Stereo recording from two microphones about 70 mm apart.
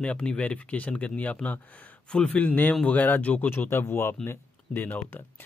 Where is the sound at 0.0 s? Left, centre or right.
Centre.